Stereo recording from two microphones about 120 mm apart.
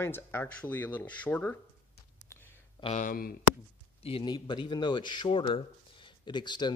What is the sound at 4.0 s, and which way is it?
A man's voice, 50° left (ahead or behind).